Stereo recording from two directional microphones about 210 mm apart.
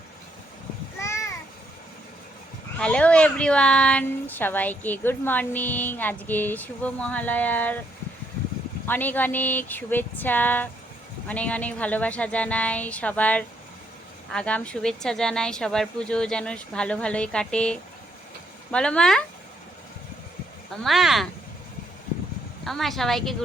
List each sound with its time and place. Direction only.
0.9 s a sound: 15° left (ahead or behind)
2.7 s speech: 5° left (ahead or behind)
8.9 s speech: 10° left (ahead or behind)
20.8 s speech: centre (ahead or behind)
22.6 s speech: centre (ahead or behind)